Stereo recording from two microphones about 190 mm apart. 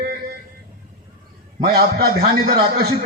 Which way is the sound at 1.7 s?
55° right (ahead or behind).